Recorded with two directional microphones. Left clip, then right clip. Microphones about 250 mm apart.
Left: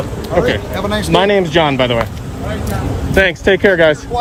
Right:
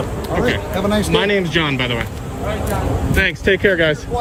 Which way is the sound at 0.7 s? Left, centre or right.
Left.